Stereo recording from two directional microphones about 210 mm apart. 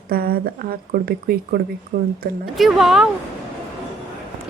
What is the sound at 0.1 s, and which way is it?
Speech, 45° right (ahead or behind).